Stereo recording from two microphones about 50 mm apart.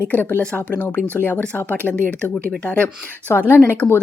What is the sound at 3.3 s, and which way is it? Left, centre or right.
Speech, left.